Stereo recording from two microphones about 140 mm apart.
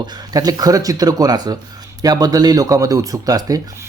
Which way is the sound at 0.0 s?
30° right (ahead or behind).